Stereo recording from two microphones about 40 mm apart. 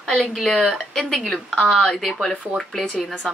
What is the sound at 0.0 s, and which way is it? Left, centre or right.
A woman's voice, centre.